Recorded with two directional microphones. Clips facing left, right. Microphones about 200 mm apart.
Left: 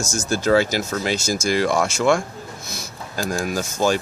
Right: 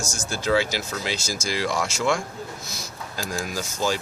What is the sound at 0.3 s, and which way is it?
Speech, 45° left (ahead or behind).